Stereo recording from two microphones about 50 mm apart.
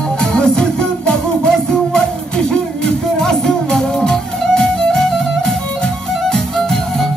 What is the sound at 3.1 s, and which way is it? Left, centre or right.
Music, centre.